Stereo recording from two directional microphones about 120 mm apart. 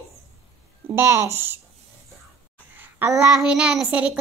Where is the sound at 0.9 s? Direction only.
20° right (ahead or behind).